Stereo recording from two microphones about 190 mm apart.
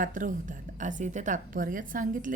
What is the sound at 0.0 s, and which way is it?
A woman's voice, 45° right (ahead or behind).